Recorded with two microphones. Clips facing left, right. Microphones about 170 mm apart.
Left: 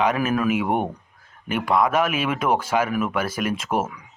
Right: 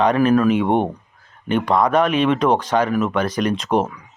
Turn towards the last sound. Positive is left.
turn(degrees=5)  # may be behind; listen again after turning